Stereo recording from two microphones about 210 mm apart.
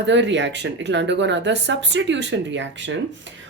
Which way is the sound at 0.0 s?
55° right (ahead or behind).